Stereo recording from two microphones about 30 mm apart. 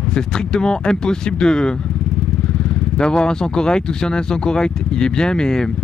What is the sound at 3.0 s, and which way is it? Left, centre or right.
Speech, left.